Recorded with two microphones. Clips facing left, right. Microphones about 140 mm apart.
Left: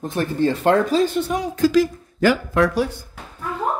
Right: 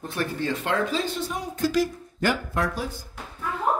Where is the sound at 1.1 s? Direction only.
75° left (ahead or behind).